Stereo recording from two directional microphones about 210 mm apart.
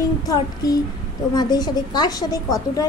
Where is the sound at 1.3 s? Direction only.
20° left (ahead or behind).